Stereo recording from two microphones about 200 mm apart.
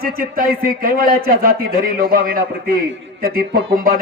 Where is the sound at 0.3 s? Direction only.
45° right (ahead or behind).